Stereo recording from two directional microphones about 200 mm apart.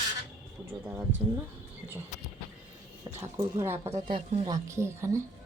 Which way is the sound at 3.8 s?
30° right (ahead or behind).